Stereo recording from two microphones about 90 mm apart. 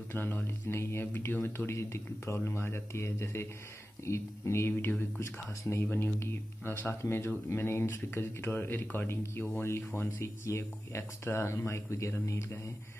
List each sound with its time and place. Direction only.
0.1 s speech: 25° left (ahead or behind)